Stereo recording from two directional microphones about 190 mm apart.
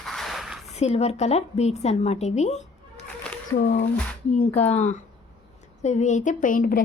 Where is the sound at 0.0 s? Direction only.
Centre (ahead or behind).